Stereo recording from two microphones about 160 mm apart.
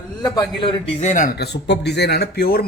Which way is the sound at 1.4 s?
90° left.